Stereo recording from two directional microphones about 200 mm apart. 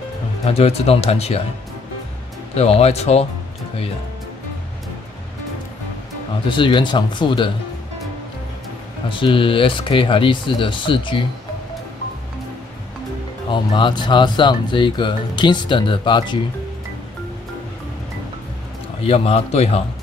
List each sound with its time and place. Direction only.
0.5 s speech: 30° left (ahead or behind)
2.5 s a man's voice: 30° left (ahead or behind)
6.5 s speech: 25° left (ahead or behind)
9.1 s speech: 25° left (ahead or behind)
13.5 s speech: 25° left (ahead or behind)
19.0 s a man's voice: 30° left (ahead or behind)